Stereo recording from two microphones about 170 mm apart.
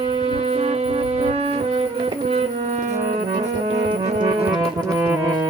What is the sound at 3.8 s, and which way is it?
Music, 25° right (ahead or behind).